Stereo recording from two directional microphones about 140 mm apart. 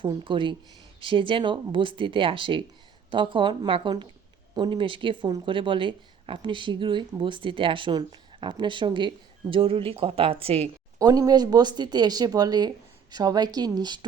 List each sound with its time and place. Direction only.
0.0 s speech: 35° right (ahead or behind)
10.9 s speech: 25° right (ahead or behind)